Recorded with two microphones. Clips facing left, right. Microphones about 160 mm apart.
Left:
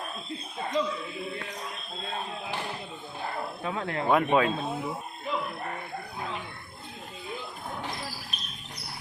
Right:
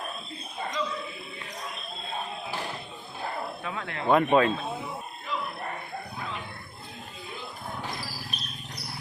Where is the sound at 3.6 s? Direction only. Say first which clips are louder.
Left 3 dB; 25° left (ahead or behind).